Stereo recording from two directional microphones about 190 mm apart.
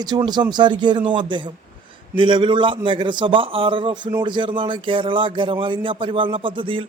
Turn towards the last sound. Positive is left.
turn(degrees=-25)  # may be behind; listen again after turning